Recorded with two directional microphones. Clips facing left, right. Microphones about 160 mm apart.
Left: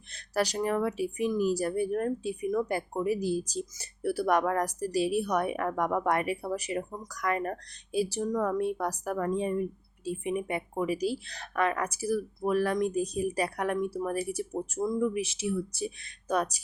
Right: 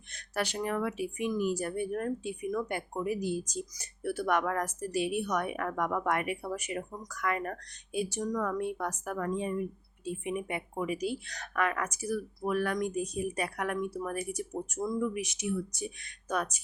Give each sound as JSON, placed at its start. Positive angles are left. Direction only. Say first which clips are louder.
{"t": 0.1, "sound": "speech", "louder": "left 5 dB", "side_deg": 35}